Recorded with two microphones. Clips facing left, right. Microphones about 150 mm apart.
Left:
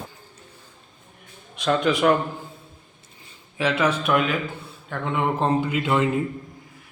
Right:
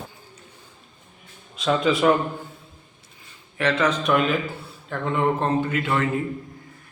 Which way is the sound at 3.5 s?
10° left (ahead or behind).